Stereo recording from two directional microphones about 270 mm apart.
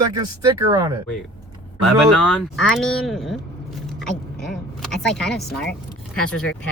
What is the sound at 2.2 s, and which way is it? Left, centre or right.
Speech, centre.